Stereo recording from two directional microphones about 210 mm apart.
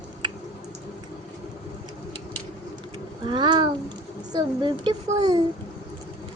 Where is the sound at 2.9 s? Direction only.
25° right (ahead or behind).